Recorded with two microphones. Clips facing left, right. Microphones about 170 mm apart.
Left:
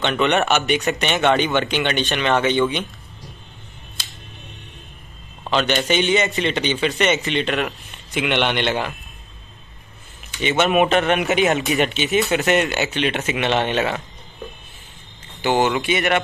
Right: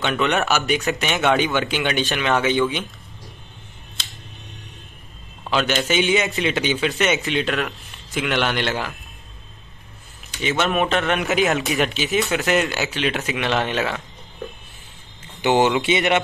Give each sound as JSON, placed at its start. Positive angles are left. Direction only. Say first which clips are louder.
{"t": 0.0, "sound": "a man's voice", "louder": "left 2 dB", "side_deg": 0}
{"t": 5.5, "sound": "a man's voice", "louder": "left 1 dB", "side_deg": -5}
{"t": 10.4, "sound": "a man's voice", "louder": "left 4 dB", "side_deg": 0}
{"t": 15.4, "sound": "speech", "louder": "right 1 dB", "side_deg": -20}